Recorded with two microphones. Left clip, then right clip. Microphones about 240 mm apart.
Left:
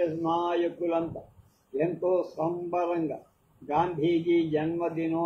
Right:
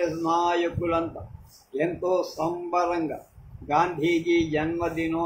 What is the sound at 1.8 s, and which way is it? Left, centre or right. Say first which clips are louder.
A man's voice: right 2 dB; right.